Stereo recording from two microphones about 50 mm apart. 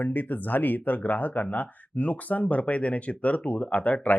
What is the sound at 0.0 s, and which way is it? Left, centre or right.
Speech, left.